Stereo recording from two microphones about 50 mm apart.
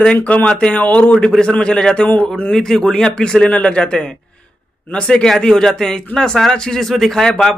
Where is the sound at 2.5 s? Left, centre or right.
Centre.